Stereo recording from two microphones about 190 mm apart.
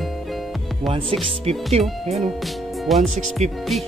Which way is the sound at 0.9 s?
25° right (ahead or behind).